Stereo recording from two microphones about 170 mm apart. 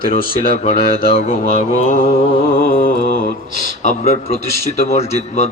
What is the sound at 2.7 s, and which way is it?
Mantra, 50° left (ahead or behind).